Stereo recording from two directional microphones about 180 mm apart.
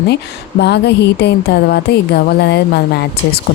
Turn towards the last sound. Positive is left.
turn(degrees=65)  # may be behind; listen again after turning